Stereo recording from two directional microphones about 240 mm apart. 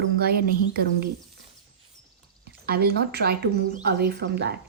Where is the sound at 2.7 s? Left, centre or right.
Right.